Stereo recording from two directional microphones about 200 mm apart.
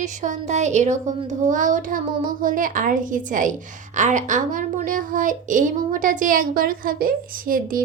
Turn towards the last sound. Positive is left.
turn(degrees=-45)  # may be behind; listen again after turning